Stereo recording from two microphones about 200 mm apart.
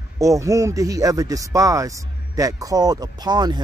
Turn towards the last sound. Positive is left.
turn(degrees=-20)  # may be behind; listen again after turning